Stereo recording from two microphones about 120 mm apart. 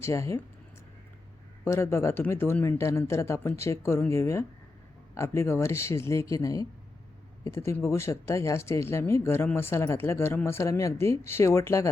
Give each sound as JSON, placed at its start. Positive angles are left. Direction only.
{"t": 0.0, "sound": "speech", "side_deg": 25}
{"t": 1.6, "sound": "speech", "side_deg": 20}